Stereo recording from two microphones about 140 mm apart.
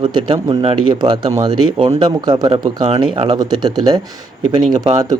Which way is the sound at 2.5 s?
45° right (ahead or behind).